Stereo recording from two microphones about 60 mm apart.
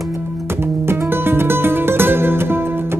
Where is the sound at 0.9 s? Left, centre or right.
Right.